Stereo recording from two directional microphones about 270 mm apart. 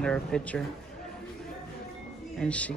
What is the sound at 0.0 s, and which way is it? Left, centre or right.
Speech, centre.